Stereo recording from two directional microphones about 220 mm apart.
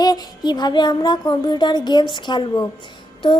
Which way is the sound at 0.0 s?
20° left (ahead or behind).